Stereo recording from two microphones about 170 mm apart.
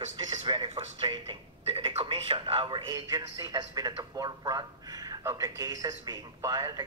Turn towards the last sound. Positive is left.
turn(degrees=-20)  # may be behind; listen again after turning